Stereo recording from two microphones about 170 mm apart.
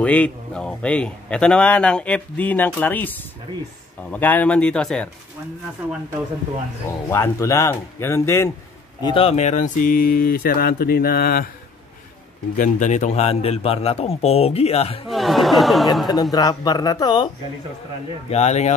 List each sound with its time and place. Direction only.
0.0 s speech: 10° left (ahead or behind)
7.1 s speech: 15° left (ahead or behind)
9.0 s speech: 35° left (ahead or behind); by 11.4 s 60° left (ahead or behind)
12.5 s speech: 45° left (ahead or behind)
15.0 s speech: centre (ahead or behind)
16.1 s speech: 20° left (ahead or behind)
18.3 s speech: 40° left (ahead or behind)